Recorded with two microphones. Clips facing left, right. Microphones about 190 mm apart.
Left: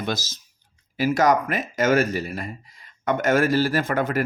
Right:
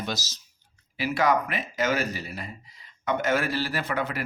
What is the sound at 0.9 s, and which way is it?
Speech, 45° left (ahead or behind).